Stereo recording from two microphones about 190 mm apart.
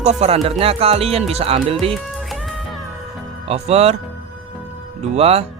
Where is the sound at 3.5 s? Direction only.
35° right (ahead or behind).